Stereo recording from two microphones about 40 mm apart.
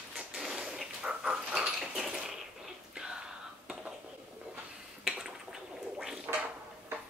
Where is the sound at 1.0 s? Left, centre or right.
Right.